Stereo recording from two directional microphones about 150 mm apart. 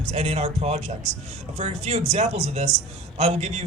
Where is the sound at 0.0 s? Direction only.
45° right (ahead or behind).